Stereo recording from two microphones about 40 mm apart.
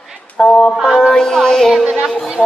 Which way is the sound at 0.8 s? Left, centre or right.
Centre.